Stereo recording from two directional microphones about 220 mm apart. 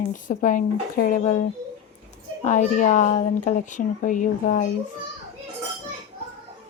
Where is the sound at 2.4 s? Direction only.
35° left (ahead or behind).